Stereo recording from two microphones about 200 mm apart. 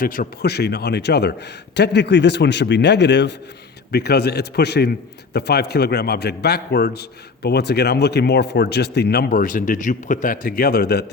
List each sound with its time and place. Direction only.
0.0 s a man's voice: 45° left (ahead or behind)